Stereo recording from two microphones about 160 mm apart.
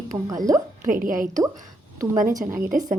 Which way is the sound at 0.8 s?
55° right (ahead or behind).